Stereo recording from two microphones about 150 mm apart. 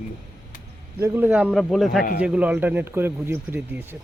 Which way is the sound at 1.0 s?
15° right (ahead or behind).